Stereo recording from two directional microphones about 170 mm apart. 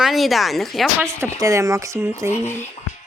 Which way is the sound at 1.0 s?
15° right (ahead or behind).